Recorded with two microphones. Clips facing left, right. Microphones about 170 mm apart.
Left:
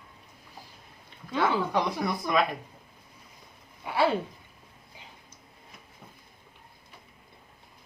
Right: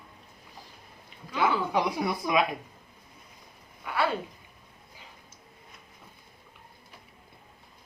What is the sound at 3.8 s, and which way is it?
Speech, 25° left (ahead or behind).